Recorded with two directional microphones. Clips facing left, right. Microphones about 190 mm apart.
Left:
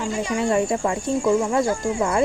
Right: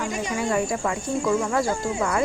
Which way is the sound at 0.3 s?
25° left (ahead or behind).